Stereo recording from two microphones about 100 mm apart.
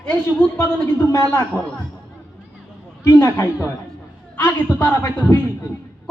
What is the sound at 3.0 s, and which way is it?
A man's voice, 25° left (ahead or behind).